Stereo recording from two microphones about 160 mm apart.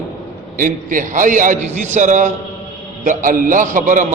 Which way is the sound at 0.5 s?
55° right (ahead or behind).